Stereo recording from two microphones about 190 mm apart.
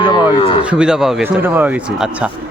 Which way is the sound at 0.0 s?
20° left (ahead or behind).